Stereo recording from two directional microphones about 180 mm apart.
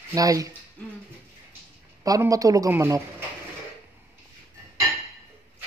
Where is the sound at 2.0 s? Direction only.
20° right (ahead or behind).